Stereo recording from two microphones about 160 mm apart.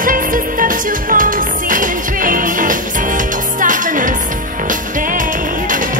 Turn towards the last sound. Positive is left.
turn(degrees=-55)  # may be behind; listen again after turning